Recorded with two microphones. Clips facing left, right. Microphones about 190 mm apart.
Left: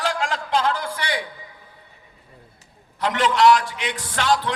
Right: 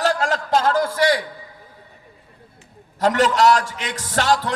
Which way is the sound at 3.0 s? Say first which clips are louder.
Right 3 dB; 40° right (ahead or behind).